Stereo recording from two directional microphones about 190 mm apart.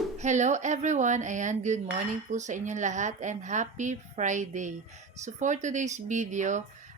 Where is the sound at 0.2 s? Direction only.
40° right (ahead or behind).